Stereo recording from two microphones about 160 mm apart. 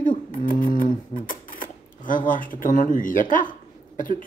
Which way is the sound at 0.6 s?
55° left (ahead or behind).